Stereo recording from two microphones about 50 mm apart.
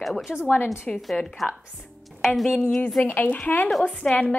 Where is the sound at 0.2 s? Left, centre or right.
Centre.